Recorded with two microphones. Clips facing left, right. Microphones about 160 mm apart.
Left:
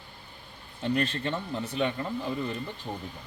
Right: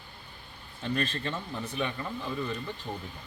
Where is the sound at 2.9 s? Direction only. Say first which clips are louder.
Left 1 dB; 5° left (ahead or behind).